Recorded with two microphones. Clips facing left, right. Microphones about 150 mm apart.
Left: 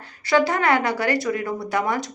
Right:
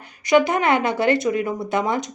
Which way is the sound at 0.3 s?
20° right (ahead or behind).